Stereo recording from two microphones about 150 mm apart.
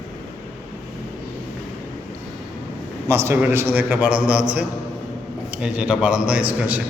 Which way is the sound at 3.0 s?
15° right (ahead or behind).